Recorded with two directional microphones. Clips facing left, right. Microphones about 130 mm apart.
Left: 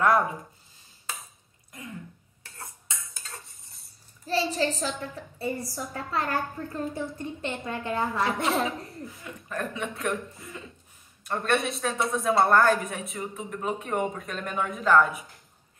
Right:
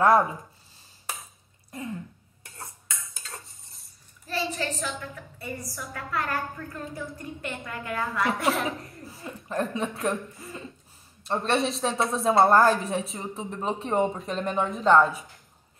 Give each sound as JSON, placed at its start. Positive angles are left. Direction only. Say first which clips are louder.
{"t": 4.3, "sound": "a woman's voice", "louder": "left 4 dB", "side_deg": 25}
{"t": 8.6, "sound": "a woman's voice", "louder": "even", "side_deg": -30}